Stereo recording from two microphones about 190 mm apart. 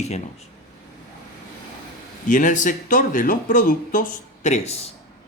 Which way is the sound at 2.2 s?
40° left (ahead or behind).